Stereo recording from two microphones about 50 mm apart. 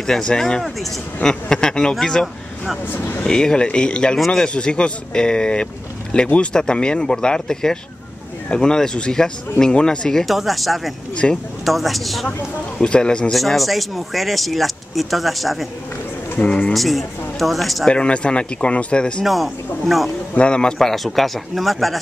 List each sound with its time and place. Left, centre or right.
0.0 s speech: centre
2.9 s speech: left
3.3 s speech: centre
10.2 s speech: centre
11.2 s speech: centre
11.6 s speech: centre
12.8 s speech: centre
13.3 s speech: centre
16.3 s speech: left
16.7 s speech: centre
17.8 s speech: left
19.2 s speech: centre
20.3 s speech: centre
20.9 s speech: centre